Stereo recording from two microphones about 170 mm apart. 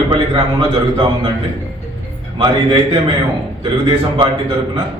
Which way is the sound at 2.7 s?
30° right (ahead or behind).